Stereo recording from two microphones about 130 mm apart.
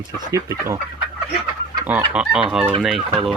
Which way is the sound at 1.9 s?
10° right (ahead or behind).